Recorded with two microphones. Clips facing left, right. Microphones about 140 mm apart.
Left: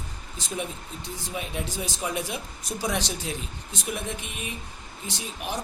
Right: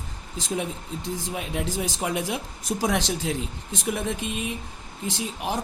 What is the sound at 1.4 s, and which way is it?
A man's voice, 90° right.